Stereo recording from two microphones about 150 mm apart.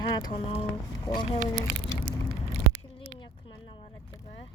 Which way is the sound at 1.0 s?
30° left (ahead or behind).